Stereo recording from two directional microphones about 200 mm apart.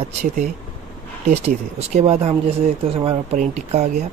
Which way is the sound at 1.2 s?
30° right (ahead or behind).